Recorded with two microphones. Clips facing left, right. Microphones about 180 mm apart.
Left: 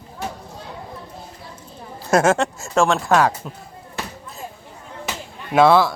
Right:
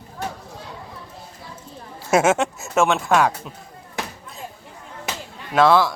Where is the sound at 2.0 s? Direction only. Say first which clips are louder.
Left 1 dB; 5° right (ahead or behind).